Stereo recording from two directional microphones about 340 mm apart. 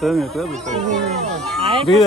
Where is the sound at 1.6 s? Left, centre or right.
Centre.